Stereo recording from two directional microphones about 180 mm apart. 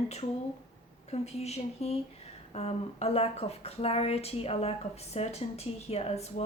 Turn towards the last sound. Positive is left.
turn(degrees=35)  # may be behind; listen again after turning